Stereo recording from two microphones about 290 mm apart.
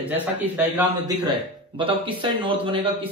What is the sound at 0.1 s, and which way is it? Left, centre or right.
A man's voice, centre.